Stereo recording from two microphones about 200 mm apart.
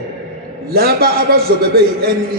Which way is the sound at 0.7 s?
50° right (ahead or behind).